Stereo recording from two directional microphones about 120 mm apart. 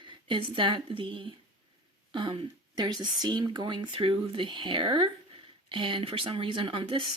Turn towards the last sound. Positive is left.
turn(degrees=-45)  # may be behind; listen again after turning